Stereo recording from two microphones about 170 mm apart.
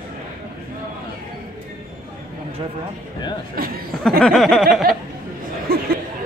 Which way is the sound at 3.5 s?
60° right (ahead or behind).